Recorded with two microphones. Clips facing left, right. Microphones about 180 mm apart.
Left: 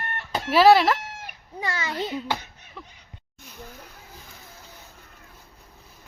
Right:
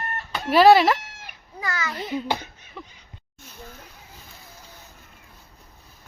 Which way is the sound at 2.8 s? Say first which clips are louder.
Right 3 dB; centre (ahead or behind).